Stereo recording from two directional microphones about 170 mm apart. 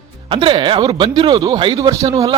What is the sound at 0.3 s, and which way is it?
Speech, 30° right (ahead or behind).